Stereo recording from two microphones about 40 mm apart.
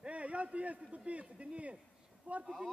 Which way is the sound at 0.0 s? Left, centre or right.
Right.